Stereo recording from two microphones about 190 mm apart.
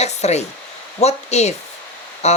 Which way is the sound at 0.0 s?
35° left (ahead or behind).